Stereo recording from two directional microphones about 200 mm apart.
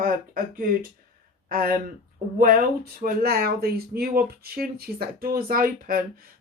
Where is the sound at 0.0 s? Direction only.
45° right (ahead or behind).